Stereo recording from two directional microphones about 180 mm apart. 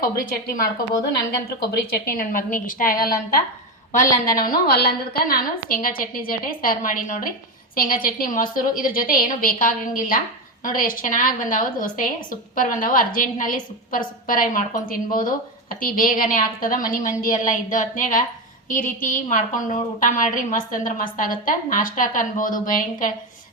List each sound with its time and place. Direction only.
0.0 s a woman's voice: 55° left (ahead or behind)
1.9 s a woman's voice: 50° left (ahead or behind)